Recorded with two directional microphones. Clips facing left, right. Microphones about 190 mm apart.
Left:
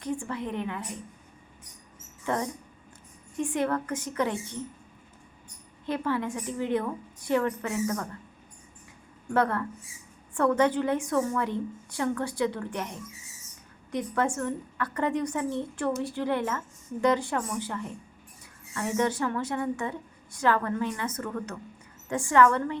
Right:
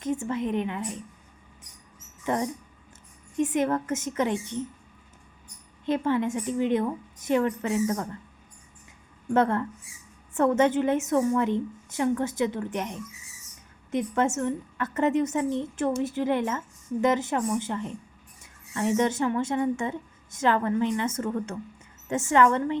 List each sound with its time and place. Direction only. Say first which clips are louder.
0.0 s a woman's voice: right 4 dB; 20° right (ahead or behind)
2.2 s a woman's voice: right 2 dB; 15° right (ahead or behind)
5.8 s a woman's voice: right 4 dB; 20° right (ahead or behind)
9.3 s a woman's voice: right 3 dB; 25° right (ahead or behind)